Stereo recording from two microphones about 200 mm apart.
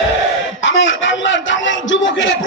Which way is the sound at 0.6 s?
70° left (ahead or behind).